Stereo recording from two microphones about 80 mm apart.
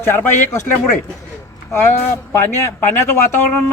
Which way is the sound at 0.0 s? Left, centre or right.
Left.